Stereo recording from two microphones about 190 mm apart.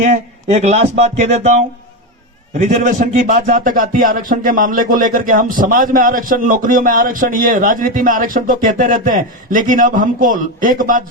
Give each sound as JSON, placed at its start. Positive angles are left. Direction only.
{"t": 0.1, "sound": "speech", "side_deg": -35}